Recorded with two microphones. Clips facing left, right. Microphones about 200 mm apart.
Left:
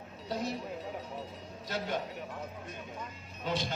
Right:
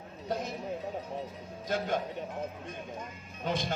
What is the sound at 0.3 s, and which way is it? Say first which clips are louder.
Speech: right 2 dB; 50° right (ahead or behind).